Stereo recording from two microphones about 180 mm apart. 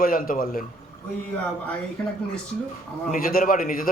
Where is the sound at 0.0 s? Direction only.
50° left (ahead or behind).